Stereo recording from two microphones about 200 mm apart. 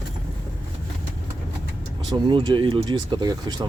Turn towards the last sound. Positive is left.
turn(degrees=-20)  # may be behind; listen again after turning